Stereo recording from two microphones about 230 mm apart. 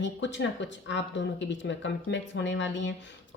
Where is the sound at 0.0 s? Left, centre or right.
Left.